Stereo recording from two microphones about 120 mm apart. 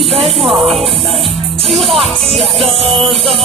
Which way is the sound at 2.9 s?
50° right (ahead or behind).